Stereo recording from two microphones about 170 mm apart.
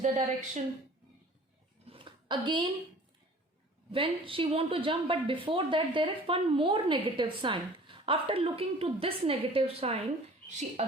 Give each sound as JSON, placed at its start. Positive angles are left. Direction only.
{"t": 0.0, "sound": "a woman's voice", "side_deg": -45}
{"t": 1.9, "sound": "a sound", "side_deg": -30}
{"t": 3.9, "sound": "a woman's voice", "side_deg": -30}